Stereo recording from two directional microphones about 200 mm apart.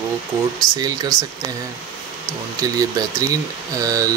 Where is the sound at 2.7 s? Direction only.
20° right (ahead or behind).